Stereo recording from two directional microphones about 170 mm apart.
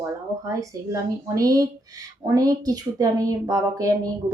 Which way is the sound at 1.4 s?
20° right (ahead or behind).